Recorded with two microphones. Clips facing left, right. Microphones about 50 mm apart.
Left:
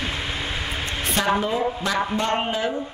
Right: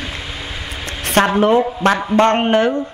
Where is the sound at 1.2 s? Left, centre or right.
Right.